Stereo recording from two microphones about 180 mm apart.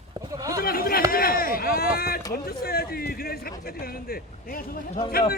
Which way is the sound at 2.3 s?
55° left (ahead or behind).